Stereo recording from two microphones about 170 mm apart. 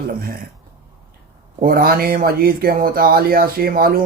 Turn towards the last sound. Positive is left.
turn(degrees=-60)  # may be behind; listen again after turning